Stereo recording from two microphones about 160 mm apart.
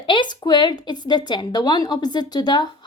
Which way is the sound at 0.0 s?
30° left (ahead or behind).